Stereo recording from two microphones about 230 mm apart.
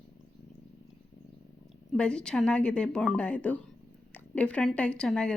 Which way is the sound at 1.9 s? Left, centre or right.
Centre.